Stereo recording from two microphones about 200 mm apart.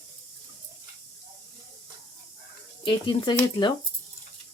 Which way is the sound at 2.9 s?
25° left (ahead or behind).